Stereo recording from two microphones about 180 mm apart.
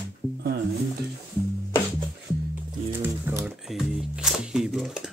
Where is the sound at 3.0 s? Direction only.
15° right (ahead or behind).